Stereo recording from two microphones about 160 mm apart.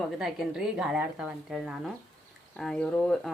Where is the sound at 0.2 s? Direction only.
5° right (ahead or behind).